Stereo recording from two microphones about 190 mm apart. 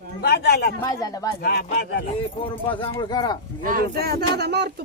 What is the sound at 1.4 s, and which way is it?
Speech, 55° left (ahead or behind).